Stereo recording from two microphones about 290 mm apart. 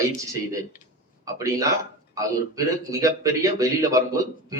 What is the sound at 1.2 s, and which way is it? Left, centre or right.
A man's voice, centre.